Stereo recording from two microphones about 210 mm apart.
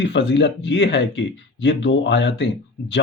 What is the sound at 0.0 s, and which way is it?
Speech, 55° left (ahead or behind).